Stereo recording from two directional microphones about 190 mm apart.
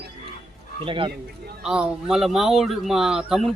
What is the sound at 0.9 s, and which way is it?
Speech, 25° right (ahead or behind).